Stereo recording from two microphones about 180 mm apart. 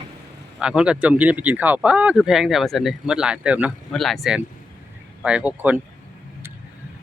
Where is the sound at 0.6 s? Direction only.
5° right (ahead or behind).